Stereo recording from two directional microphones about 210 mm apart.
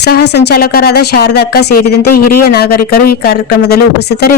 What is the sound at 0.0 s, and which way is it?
A woman's voice, 50° left (ahead or behind).